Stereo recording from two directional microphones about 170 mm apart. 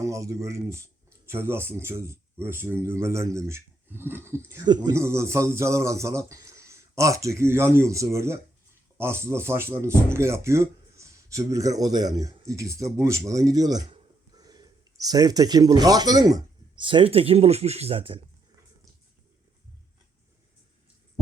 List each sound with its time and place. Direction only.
0.0 s speech: 20° right (ahead or behind); by 18.2 s 35° right (ahead or behind)